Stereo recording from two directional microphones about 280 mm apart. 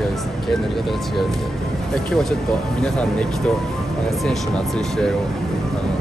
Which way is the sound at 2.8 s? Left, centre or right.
Centre.